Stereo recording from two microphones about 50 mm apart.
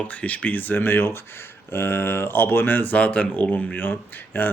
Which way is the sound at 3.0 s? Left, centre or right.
Left.